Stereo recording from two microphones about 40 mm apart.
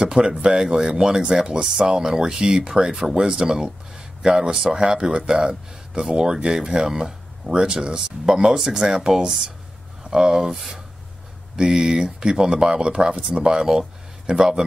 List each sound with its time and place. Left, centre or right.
0.0 s speech: centre